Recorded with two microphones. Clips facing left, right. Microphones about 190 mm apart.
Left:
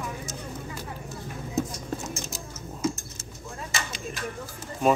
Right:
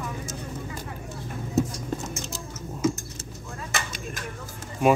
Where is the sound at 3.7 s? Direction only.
50° right (ahead or behind).